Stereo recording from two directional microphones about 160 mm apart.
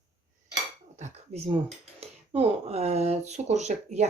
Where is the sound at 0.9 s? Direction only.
40° right (ahead or behind).